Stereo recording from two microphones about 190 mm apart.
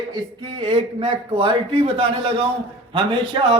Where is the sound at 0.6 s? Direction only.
30° right (ahead or behind).